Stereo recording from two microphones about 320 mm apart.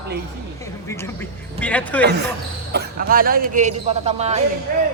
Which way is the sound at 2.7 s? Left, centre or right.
Right.